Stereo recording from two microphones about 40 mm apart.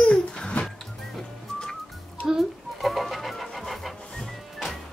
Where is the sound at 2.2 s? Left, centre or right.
Right.